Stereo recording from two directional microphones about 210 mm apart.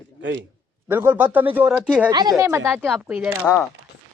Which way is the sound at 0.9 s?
10° right (ahead or behind).